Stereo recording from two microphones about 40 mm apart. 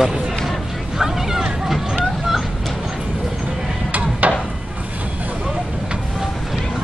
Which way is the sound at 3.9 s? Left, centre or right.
Right.